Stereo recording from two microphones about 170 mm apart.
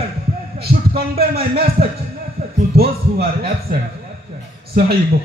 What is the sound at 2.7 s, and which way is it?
A man's voice, 65° right (ahead or behind).